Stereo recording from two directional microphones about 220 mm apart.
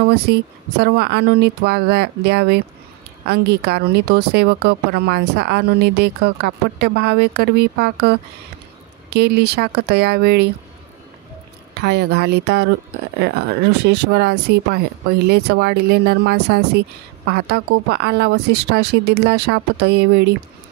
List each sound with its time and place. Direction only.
0.1 s a woman's voice: 50° right (ahead or behind)
11.7 s a woman's voice: 50° right (ahead or behind)
17.8 s a woman's voice: 45° right (ahead or behind)